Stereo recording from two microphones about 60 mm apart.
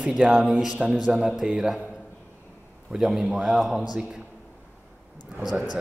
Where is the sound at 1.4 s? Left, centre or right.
Centre.